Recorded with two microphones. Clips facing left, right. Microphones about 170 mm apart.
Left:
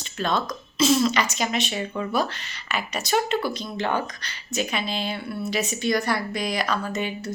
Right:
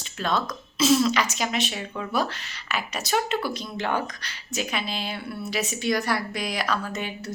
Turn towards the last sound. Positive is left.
turn(degrees=-5)  # may be behind; listen again after turning